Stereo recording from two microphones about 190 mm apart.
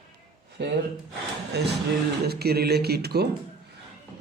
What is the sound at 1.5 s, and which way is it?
Speech, 60° right (ahead or behind).